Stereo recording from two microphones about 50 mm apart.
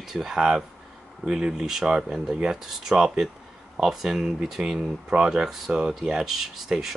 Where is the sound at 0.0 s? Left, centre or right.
Centre.